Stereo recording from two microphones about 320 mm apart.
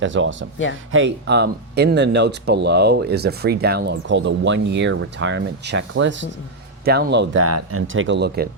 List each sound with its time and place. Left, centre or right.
0.0 s speech: right